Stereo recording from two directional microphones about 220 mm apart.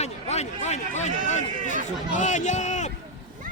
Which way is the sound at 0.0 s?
30° left (ahead or behind).